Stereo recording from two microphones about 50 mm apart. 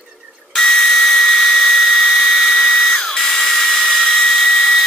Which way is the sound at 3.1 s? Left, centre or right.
Centre.